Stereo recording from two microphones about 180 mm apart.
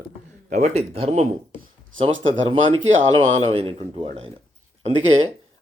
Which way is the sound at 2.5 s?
35° right (ahead or behind).